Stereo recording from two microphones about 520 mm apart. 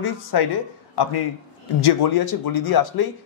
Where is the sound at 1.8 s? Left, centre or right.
Left.